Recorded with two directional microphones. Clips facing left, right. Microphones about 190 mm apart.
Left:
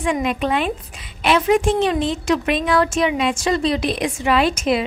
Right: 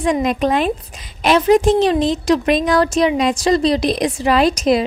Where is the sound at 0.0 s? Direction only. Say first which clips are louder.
Right 4 dB; 40° right (ahead or behind).